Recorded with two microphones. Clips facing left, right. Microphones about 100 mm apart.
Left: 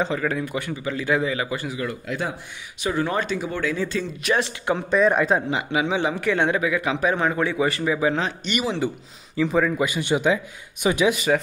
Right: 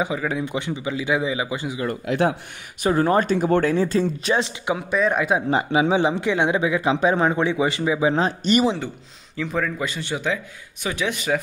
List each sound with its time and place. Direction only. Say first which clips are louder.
0.0 s speech: even; 10° right (ahead or behind)
0.5 s speech: right 1 dB; 20° right (ahead or behind)
1.9 s speech: right 7 dB; 60° right (ahead or behind)
2.8 s speech: right 5 dB; 40° right (ahead or behind)
3.4 s speech: right 7 dB; 55° right (ahead or behind)
3.7 s speech: right 6 dB; 40° right (ahead or behind)
4.3 s speech: even; 20° right (ahead or behind)
4.7 s speech: left 3 dB; centre (ahead or behind)
5.5 s speech: right 4 dB; 30° right (ahead or behind)
8.1 s speech: right 5 dB; 35° right (ahead or behind)
9.4 s a man's voice: left 4 dB; 5° left (ahead or behind)
11.1 s speech: left 4 dB; 5° left (ahead or behind)